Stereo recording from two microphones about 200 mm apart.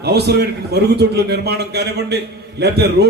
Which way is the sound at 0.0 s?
55° right (ahead or behind).